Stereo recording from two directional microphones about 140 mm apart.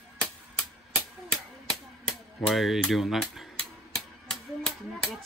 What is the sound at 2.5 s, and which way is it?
Speech, centre (ahead or behind).